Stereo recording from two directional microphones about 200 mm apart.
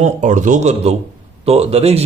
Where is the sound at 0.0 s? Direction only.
35° right (ahead or behind).